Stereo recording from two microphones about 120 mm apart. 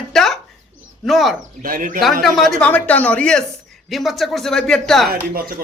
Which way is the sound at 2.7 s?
15° left (ahead or behind).